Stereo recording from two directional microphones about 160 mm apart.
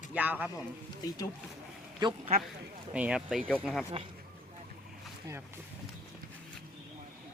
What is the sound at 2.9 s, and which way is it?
Speech, 5° right (ahead or behind).